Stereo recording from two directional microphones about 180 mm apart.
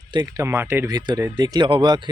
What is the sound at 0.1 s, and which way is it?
Speech, 20° right (ahead or behind).